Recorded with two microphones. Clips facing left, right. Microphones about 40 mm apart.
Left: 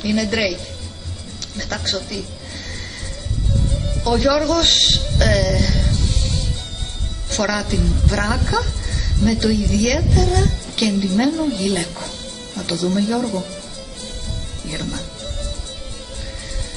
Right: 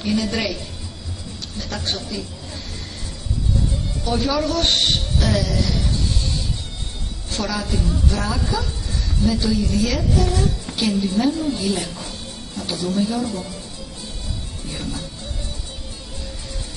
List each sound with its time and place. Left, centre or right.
0.0 s a woman's voice: left
1.6 s a woman's voice: left
4.0 s a woman's voice: left
7.2 s a woman's voice: left
14.7 s music: left